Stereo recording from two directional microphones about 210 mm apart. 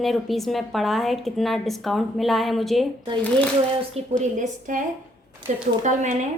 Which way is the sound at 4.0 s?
30° right (ahead or behind).